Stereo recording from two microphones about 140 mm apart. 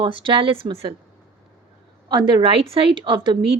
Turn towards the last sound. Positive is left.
turn(degrees=-35)  # may be behind; listen again after turning